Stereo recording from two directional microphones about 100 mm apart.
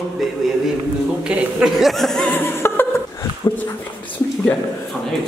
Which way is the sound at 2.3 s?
25° left (ahead or behind).